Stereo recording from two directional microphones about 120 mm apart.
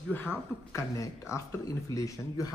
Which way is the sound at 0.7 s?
25° left (ahead or behind).